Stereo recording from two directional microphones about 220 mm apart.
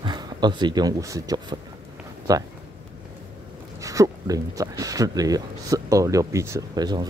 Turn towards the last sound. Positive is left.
turn(degrees=-20)  # may be behind; listen again after turning